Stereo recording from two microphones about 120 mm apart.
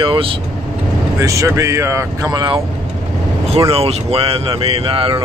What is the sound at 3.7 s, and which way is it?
Speech, 55° right (ahead or behind).